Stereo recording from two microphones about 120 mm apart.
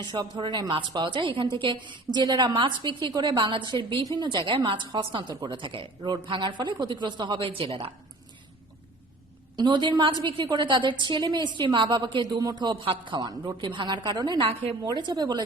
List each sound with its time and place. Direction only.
0.0 s a woman's voice: 35° right (ahead or behind)
9.6 s a woman's voice: 40° right (ahead or behind)